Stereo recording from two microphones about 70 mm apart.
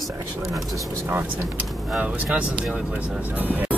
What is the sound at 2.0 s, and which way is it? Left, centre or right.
Speech, centre.